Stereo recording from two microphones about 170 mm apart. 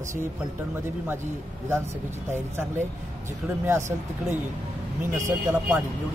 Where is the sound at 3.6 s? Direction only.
15° right (ahead or behind).